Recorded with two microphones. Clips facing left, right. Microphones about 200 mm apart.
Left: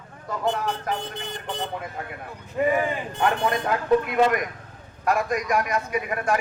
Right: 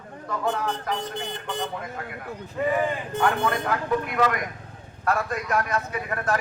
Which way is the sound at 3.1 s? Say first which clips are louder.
Even; 25° left (ahead or behind).